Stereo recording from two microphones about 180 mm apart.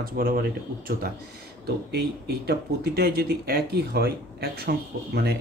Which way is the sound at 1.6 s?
60° right (ahead or behind).